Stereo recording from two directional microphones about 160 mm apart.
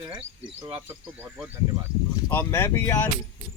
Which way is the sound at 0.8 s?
15° right (ahead or behind).